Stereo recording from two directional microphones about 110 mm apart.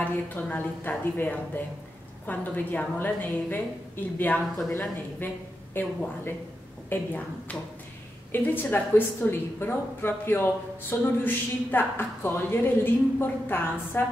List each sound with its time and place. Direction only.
0.0 s a woman's voice: 15° left (ahead or behind)